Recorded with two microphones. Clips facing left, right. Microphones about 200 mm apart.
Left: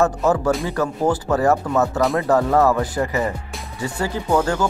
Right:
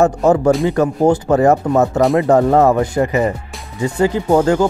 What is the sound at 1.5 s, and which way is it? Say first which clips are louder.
Speech: right 5 dB; 35° right (ahead or behind).